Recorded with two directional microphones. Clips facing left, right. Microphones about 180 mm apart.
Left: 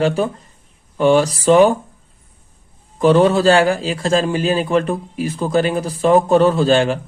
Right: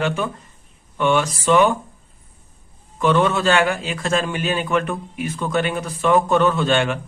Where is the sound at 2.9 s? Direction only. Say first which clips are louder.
Left 6 dB; 35° left (ahead or behind).